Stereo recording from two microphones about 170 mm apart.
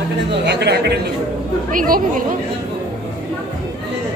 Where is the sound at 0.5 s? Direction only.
80° right.